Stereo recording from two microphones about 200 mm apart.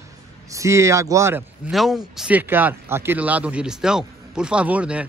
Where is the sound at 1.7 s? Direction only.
Centre (ahead or behind).